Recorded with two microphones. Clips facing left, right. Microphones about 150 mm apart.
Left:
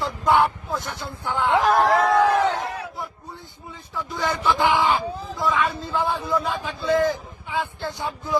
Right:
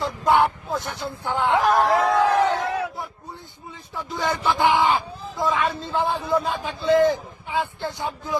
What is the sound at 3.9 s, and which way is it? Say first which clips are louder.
Speech: even; 20° right (ahead or behind).